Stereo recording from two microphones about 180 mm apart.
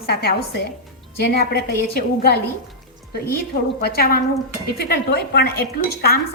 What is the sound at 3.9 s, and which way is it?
Speech, 55° left (ahead or behind).